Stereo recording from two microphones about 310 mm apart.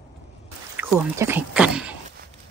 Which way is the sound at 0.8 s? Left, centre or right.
Centre.